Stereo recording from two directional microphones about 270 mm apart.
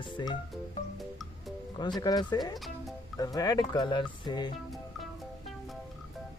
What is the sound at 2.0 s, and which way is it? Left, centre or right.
Speech, centre.